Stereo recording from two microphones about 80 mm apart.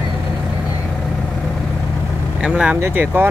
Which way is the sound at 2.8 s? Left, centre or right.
Right.